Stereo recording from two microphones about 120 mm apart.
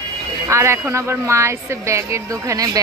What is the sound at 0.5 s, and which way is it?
Speech, 20° right (ahead or behind).